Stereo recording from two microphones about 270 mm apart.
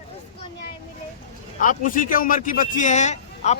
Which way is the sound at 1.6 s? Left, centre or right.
Left.